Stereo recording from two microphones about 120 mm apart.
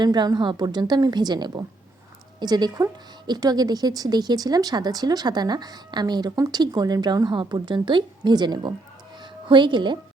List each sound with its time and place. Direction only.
0.0 s speech: 35° right (ahead or behind)